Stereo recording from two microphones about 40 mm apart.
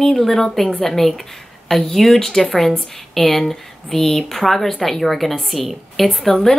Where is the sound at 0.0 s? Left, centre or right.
Centre.